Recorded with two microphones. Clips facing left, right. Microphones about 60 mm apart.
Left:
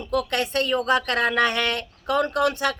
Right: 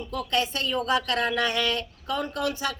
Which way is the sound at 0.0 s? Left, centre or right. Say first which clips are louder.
Left 3 dB; left.